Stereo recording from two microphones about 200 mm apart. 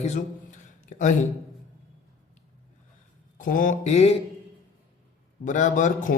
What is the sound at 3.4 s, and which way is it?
Speech, 40° left (ahead or behind).